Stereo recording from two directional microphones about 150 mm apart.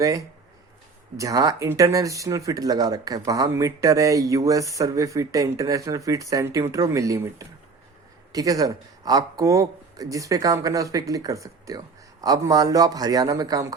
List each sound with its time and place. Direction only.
0.0 s speech: 20° right (ahead or behind)